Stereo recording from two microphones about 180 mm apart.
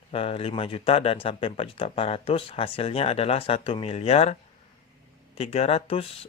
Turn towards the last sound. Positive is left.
turn(degrees=35)  # may be behind; listen again after turning